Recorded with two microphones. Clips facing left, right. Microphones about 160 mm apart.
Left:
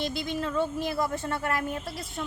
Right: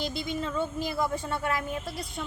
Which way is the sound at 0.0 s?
Centre (ahead or behind).